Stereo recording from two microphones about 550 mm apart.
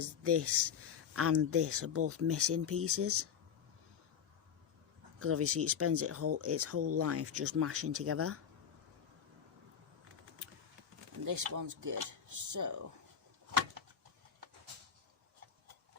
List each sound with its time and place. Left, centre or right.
0.0 s speech: right
5.2 s speech: right
11.3 s speech: right